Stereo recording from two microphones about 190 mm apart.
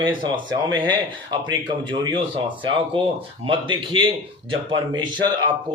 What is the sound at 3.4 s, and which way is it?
Speech, 25° right (ahead or behind).